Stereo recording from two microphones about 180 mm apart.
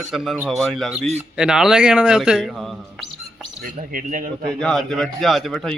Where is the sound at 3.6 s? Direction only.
50° right (ahead or behind).